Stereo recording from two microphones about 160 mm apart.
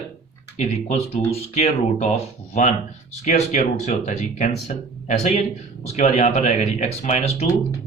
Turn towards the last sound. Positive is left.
turn(degrees=40)  # may be behind; listen again after turning